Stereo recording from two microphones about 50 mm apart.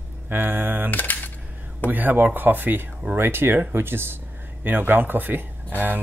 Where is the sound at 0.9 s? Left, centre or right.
Left.